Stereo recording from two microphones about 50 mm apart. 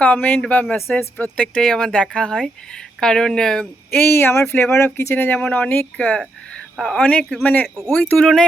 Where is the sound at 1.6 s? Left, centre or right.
Centre.